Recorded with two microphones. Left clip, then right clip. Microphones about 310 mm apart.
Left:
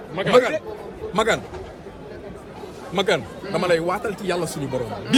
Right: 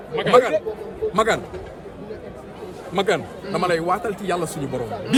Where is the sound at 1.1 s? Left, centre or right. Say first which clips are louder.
Right 1 dB; centre.